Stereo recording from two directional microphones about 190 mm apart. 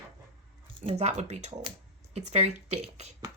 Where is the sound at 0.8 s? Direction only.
35° right (ahead or behind).